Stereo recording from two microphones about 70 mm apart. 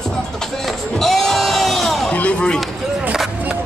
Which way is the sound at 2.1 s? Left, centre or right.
Centre.